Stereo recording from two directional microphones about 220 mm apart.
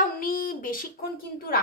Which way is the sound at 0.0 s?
40° left (ahead or behind).